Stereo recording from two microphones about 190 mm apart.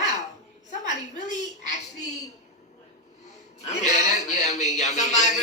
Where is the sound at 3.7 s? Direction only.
40° left (ahead or behind).